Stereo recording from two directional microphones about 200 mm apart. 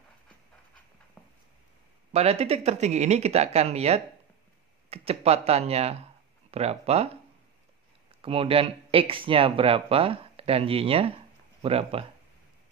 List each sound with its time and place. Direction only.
1.2 s a sound: 5° left (ahead or behind)
2.1 s speech: 30° right (ahead or behind)
8.1 s speech: 30° right (ahead or behind)